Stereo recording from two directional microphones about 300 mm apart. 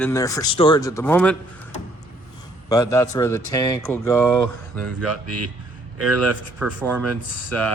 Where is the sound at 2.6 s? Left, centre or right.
Centre.